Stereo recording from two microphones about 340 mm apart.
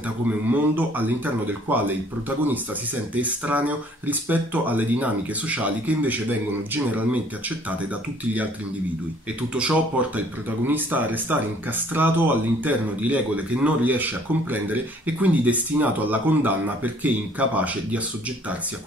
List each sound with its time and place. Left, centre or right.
0.5 s speech: centre
9.5 s speech: centre